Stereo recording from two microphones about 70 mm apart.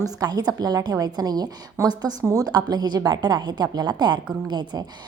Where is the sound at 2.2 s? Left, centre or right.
Right.